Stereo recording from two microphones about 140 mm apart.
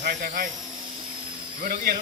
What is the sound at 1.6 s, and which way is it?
Speech, 90° right.